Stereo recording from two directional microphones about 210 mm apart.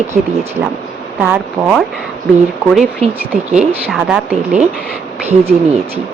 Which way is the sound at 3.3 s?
Centre (ahead or behind).